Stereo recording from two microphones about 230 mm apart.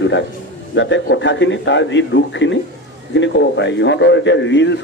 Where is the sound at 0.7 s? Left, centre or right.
Left.